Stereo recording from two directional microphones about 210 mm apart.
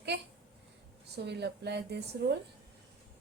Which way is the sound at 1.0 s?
50° right (ahead or behind).